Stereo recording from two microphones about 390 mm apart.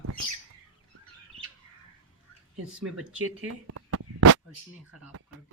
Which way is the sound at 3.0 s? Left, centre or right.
Right.